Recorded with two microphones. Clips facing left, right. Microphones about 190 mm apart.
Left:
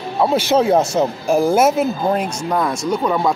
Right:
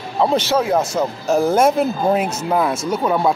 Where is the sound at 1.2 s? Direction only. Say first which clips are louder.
Even; 10° left (ahead or behind).